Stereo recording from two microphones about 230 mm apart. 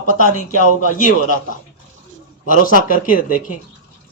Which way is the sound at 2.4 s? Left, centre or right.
Left.